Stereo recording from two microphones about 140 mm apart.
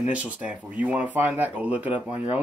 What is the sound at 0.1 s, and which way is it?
Speech, 10° right (ahead or behind).